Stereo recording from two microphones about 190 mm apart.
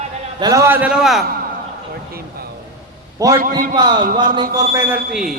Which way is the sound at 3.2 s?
15° right (ahead or behind).